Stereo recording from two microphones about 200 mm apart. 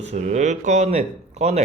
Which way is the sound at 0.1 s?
35° right (ahead or behind).